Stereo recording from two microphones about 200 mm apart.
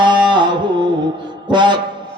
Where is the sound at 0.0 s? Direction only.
25° right (ahead or behind).